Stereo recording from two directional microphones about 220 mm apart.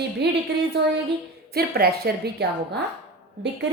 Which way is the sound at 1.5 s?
45° right (ahead or behind).